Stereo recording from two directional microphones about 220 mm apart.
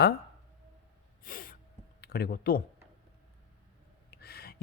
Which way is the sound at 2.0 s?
45° left (ahead or behind).